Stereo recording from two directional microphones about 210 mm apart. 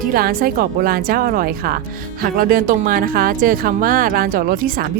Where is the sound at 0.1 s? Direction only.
45° right (ahead or behind).